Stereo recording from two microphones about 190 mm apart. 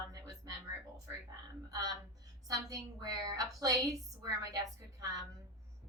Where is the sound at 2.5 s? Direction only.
20° right (ahead or behind).